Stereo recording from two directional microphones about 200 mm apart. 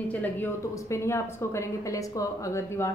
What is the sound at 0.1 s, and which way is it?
A woman's voice, 10° left (ahead or behind).